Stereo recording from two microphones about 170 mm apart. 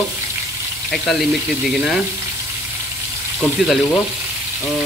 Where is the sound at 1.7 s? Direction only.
Centre (ahead or behind).